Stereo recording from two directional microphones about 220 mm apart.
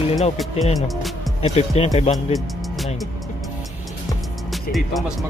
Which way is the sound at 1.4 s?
30° left (ahead or behind).